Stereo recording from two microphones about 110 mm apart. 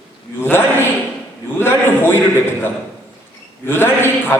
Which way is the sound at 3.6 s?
20° left (ahead or behind).